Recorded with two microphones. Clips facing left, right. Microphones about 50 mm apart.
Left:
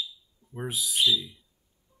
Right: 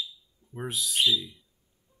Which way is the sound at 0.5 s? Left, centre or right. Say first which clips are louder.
Even; centre.